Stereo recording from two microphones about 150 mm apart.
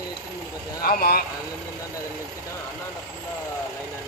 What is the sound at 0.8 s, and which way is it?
Speech, 75° left (ahead or behind).